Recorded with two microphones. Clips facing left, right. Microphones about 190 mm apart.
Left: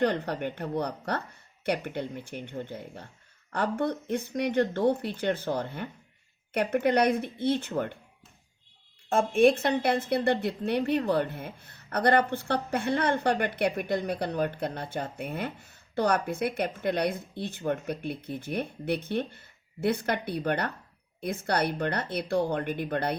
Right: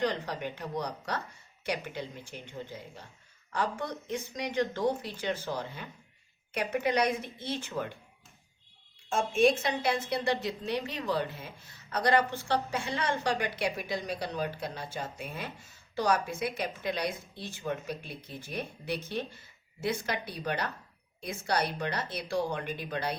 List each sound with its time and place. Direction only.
0.0 s a woman's voice: 60° left (ahead or behind)
9.0 s a woman's voice: 60° left (ahead or behind)